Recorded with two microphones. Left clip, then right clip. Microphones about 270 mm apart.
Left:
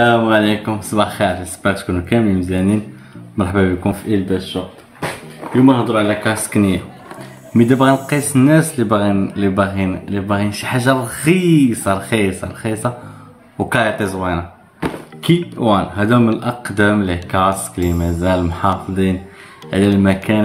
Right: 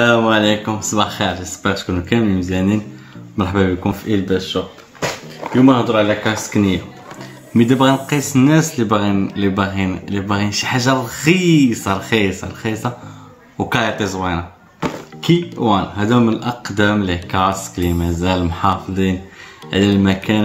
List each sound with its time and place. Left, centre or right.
0.0 s speech: centre
5.7 s speech: centre